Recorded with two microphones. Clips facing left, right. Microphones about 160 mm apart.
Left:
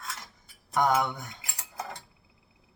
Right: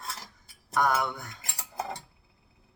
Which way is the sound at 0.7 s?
20° left (ahead or behind).